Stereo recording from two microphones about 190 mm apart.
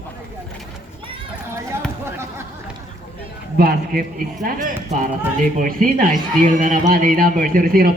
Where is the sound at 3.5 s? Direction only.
50° right (ahead or behind).